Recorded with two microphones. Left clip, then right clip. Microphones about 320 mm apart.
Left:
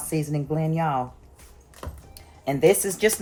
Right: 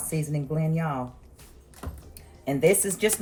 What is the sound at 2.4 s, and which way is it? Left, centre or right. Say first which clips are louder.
Speech: left 3 dB; centre.